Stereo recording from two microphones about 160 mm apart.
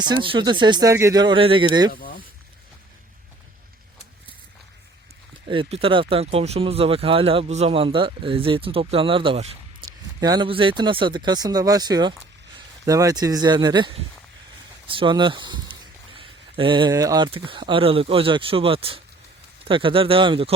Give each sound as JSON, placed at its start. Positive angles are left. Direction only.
{"t": 0.0, "sound": "speech", "side_deg": -30}
{"t": 1.9, "sound": "speech", "side_deg": 65}
{"t": 5.5, "sound": "speech", "side_deg": -35}
{"t": 9.8, "sound": "a sound", "side_deg": -30}
{"t": 10.2, "sound": "speech", "side_deg": -25}